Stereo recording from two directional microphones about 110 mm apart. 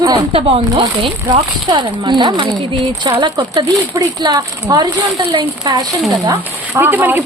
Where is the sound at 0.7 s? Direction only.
45° right (ahead or behind).